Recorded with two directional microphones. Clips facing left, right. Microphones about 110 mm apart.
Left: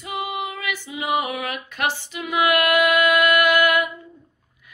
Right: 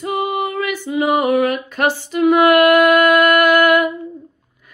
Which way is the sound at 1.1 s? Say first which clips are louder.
Right 8 dB; 45° right (ahead or behind).